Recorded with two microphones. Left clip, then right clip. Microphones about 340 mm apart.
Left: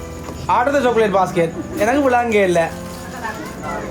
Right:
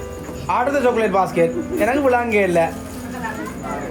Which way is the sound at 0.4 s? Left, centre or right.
Left.